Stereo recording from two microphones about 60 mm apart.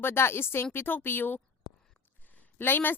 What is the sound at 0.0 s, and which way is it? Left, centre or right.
Speech, left.